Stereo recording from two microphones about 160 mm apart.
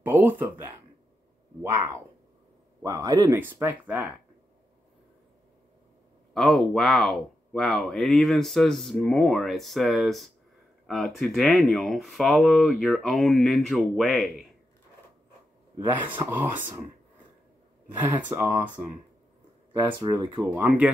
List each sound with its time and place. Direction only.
0.0 s speech: 10° right (ahead or behind)
2.8 s speech: 25° right (ahead or behind)
3.3 s speech: 15° right (ahead or behind)
6.3 s speech: centre (ahead or behind)
16.3 s speech: 15° right (ahead or behind)
17.9 s speech: 15° right (ahead or behind)
19.8 s speech: 25° right (ahead or behind)
20.6 s speech: 10° right (ahead or behind)